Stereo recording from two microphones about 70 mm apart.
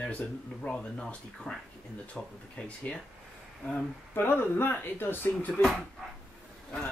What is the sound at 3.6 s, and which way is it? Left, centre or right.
Speech, left.